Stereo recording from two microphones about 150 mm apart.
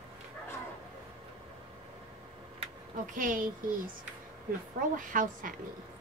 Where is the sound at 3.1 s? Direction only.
65° right (ahead or behind).